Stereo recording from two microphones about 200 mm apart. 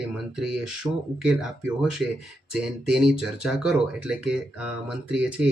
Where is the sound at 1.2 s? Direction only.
5° right (ahead or behind).